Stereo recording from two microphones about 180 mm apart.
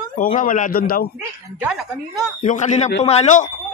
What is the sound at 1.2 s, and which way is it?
Speech, 5° right (ahead or behind).